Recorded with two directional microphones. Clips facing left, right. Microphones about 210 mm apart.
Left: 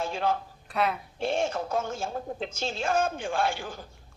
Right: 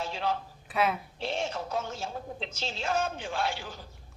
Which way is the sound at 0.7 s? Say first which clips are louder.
Even; centre (ahead or behind).